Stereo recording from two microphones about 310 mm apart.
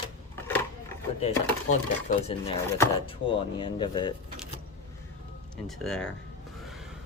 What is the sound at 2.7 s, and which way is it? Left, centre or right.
Speech, centre.